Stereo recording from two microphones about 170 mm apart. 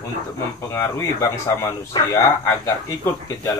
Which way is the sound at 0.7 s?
15° left (ahead or behind).